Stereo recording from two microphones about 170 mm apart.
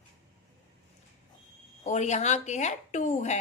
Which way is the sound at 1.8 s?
45° left (ahead or behind).